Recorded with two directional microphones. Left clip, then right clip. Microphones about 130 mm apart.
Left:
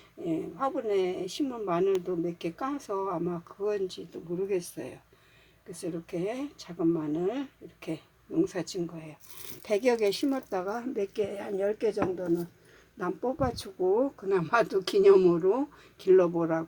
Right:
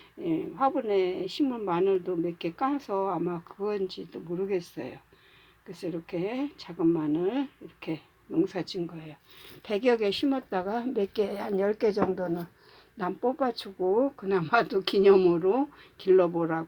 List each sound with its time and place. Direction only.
0.3 s a woman's voice: 15° right (ahead or behind)
13.4 s speech: 10° right (ahead or behind)